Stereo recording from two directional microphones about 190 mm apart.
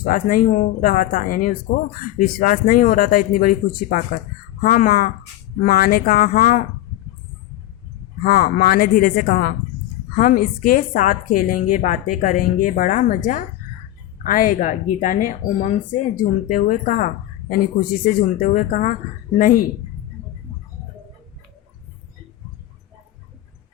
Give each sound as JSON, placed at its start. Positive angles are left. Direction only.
{"t": 0.0, "sound": "a woman's voice", "side_deg": 45}
{"t": 8.2, "sound": "a woman's voice", "side_deg": 50}